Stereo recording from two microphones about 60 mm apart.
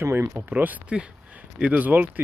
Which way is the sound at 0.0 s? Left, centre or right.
Right.